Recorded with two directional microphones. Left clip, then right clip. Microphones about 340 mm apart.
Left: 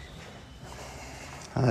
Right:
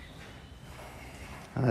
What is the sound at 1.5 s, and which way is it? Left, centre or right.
Speech, centre.